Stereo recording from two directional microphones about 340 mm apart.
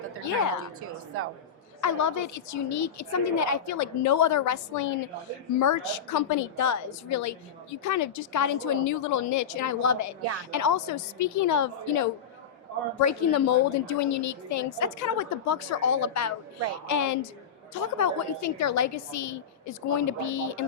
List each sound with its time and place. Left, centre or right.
0.8 s a woman's voice: right
1.8 s a woman's voice: left